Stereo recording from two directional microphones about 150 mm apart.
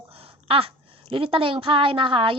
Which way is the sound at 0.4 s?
35° right (ahead or behind).